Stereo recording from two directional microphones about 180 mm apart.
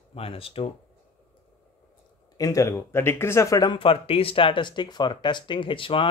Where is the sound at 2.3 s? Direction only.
20° left (ahead or behind).